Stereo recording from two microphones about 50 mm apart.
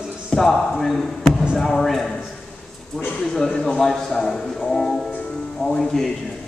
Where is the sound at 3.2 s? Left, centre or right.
Centre.